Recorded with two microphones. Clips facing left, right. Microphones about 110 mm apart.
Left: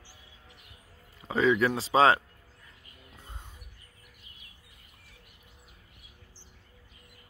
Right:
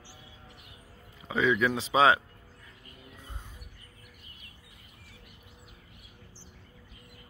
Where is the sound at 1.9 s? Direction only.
15° right (ahead or behind).